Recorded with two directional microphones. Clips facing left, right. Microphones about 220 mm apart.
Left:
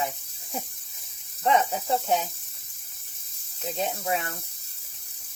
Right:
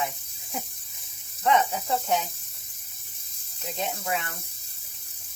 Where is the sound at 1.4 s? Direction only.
35° left (ahead or behind).